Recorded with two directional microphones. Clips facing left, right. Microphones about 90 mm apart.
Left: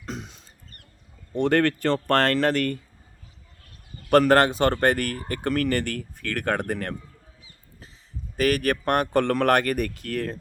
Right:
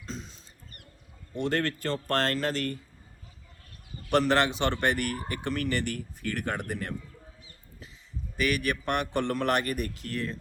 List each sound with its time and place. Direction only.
0.0 s a sound: 65° left (ahead or behind)
1.4 s speech: 65° left (ahead or behind)
4.1 s speech: 50° left (ahead or behind)
8.4 s speech: 45° left (ahead or behind)